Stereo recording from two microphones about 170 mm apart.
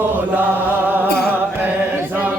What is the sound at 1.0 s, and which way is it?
Music, 65° left (ahead or behind).